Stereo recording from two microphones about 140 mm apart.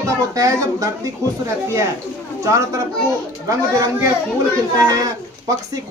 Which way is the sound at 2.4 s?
25° right (ahead or behind).